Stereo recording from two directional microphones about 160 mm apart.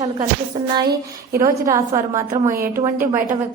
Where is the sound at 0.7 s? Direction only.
25° right (ahead or behind).